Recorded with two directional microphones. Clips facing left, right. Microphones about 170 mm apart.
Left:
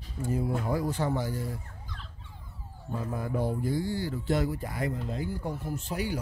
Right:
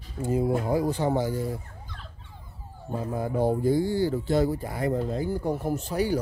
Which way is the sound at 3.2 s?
25° right (ahead or behind).